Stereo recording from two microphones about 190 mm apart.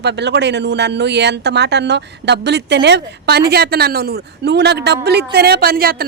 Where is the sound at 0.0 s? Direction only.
65° right (ahead or behind).